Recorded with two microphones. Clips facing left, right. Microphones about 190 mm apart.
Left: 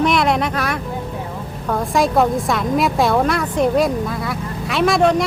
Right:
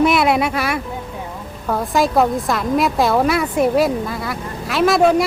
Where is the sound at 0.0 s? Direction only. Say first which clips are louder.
Right 2 dB; 5° right (ahead or behind).